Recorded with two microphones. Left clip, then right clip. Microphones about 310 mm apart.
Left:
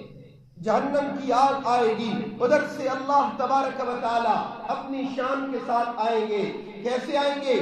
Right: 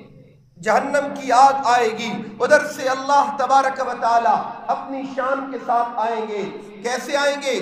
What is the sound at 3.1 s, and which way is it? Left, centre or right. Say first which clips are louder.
Speech: right 4 dB; right.